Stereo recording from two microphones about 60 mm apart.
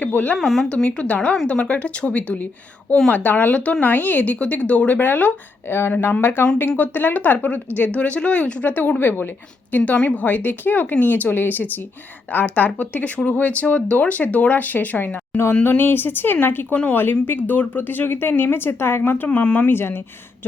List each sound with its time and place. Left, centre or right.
0.0 s speech: left
0.3 s speech: centre
0.9 s speech: left
3.8 s a woman's voice: left
7.9 s a woman's voice: centre; by 19.3 s left
19.3 s speech: left
19.7 s a woman's voice: left